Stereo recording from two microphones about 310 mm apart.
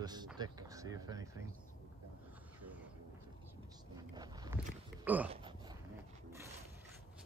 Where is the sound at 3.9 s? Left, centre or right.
Centre.